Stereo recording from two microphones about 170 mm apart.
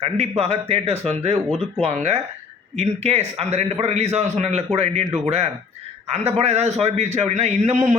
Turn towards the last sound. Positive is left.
turn(degrees=-45)  # may be behind; listen again after turning